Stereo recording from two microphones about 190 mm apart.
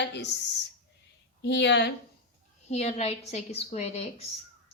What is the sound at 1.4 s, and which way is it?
Speech, 65° left (ahead or behind).